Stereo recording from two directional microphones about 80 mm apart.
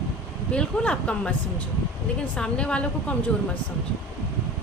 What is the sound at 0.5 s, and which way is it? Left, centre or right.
Speech, centre.